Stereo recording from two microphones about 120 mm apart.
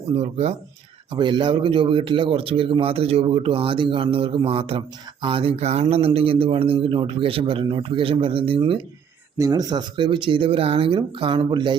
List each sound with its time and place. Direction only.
0.2 s speech: 65° right (ahead or behind)
1.1 s speech: 40° right (ahead or behind)
9.4 s speech: 30° right (ahead or behind)